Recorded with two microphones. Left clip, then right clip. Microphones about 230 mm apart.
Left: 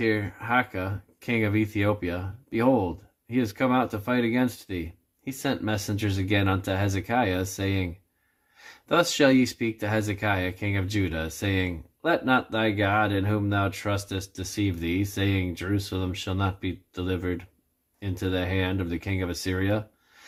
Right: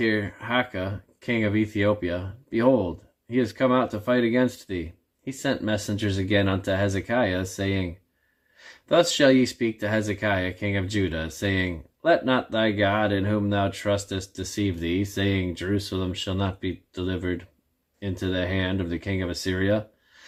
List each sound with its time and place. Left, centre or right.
0.0 s speech: centre